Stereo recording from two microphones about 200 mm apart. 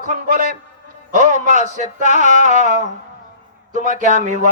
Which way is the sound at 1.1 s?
40° right (ahead or behind).